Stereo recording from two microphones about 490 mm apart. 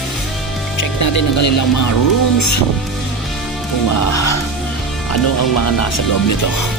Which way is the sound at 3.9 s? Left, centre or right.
Left.